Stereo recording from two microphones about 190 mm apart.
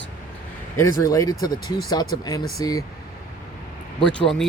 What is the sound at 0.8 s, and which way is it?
Speech, 15° left (ahead or behind).